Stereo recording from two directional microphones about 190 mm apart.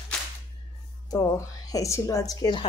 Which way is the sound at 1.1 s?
20° left (ahead or behind).